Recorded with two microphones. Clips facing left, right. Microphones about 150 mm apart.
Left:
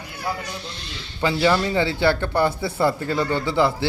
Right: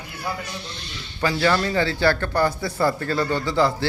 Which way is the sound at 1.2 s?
15° left (ahead or behind).